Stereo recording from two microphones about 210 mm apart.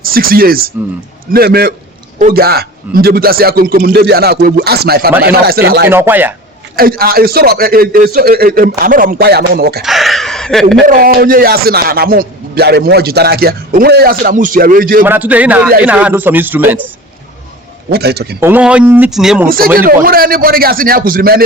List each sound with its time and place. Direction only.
0.0 s speech: 45° right (ahead or behind)
5.9 s speech: 10° right (ahead or behind)
6.7 s speech: 45° right (ahead or behind)
9.8 s a sound: centre (ahead or behind)
10.8 s speech: 40° right (ahead or behind)
15.0 s speech: 10° right (ahead or behind)
17.9 s speech: 50° right (ahead or behind)
18.3 s speech: 10° right (ahead or behind)
19.5 s speech: 45° right (ahead or behind)